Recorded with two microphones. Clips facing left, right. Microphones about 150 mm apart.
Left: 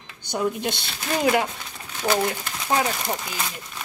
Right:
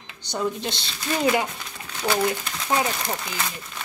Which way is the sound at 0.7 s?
55° left (ahead or behind).